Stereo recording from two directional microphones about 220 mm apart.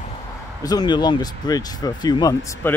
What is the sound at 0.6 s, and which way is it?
Speech, 20° left (ahead or behind).